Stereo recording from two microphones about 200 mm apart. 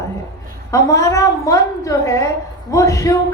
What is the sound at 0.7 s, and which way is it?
A woman's voice, 15° left (ahead or behind).